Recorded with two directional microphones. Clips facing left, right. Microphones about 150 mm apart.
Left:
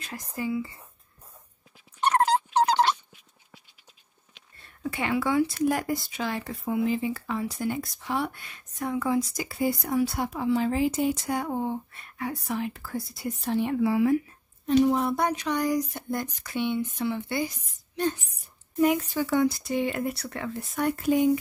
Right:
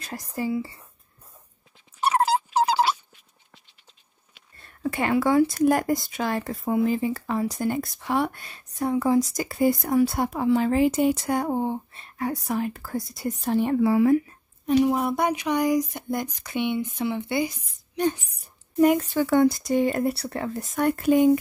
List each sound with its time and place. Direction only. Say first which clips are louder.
0.0 s speech: right 3 dB; 35° right (ahead or behind)
2.0 s dog: right 1 dB; 10° right (ahead or behind)
4.8 s speech: right 5 dB; 50° right (ahead or behind)
8.4 s speech: right 5 dB; 35° right (ahead or behind)
9.3 s speech: right 5 dB; 50° right (ahead or behind)
11.4 s speech: right 4 dB; 30° right (ahead or behind)
12.2 s speech: right 4 dB; 45° right (ahead or behind)
14.7 s speech: right 1 dB; 10° right (ahead or behind)
18.8 s speech: right 4 dB; 45° right (ahead or behind)
20.7 s speech: right 4 dB; 55° right (ahead or behind)